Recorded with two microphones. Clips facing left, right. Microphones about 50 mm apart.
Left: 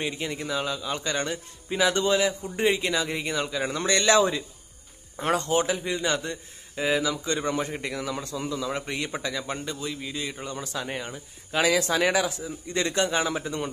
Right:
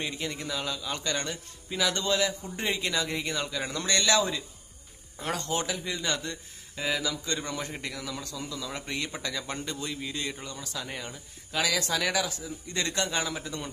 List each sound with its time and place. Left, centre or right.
0.0 s a man's voice: centre
3.7 s speech: left
5.5 s a man's voice: left
10.5 s speech: left